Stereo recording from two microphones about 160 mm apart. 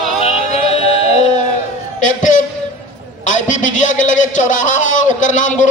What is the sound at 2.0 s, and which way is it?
Music, 50° left (ahead or behind).